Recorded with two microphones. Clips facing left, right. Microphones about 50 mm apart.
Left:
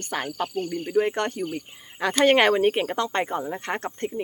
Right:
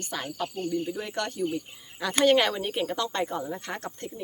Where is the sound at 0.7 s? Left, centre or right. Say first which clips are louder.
Left 7 dB; left.